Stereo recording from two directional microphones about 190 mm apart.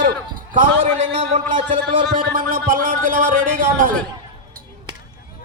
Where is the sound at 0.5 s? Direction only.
40° right (ahead or behind).